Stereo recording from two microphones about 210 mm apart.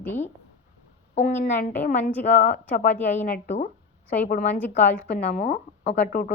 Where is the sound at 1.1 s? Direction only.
35° left (ahead or behind).